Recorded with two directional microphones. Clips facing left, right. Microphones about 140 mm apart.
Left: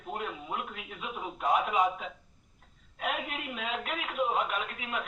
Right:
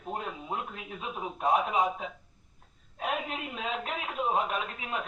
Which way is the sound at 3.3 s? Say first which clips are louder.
Right 1 dB; 30° right (ahead or behind).